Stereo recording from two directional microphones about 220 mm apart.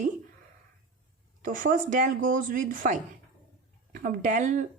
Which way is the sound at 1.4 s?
35° right (ahead or behind).